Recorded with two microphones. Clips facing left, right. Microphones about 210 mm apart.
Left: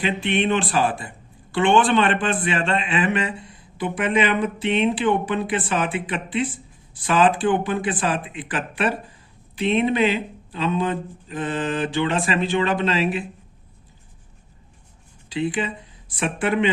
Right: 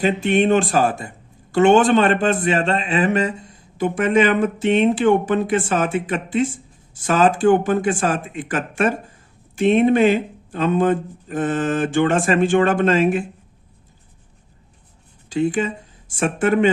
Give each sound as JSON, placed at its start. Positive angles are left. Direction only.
{"t": 0.0, "sound": "speech", "side_deg": -45}
{"t": 15.3, "sound": "speech", "side_deg": -45}